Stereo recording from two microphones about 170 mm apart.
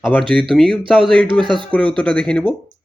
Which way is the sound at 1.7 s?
10° left (ahead or behind).